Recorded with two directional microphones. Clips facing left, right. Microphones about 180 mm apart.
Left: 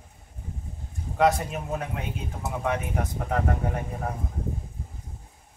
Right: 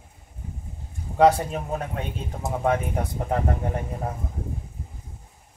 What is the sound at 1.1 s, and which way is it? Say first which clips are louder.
Speech: right 4 dB; 30° right (ahead or behind).